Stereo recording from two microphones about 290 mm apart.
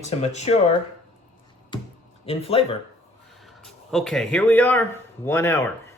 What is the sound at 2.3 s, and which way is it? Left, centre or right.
Speech, centre.